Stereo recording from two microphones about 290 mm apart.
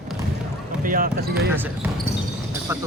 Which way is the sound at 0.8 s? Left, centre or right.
Right.